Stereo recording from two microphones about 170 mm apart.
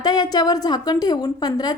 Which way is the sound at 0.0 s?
25° left (ahead or behind).